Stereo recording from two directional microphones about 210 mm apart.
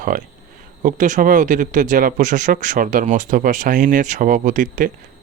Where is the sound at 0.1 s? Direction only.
40° right (ahead or behind).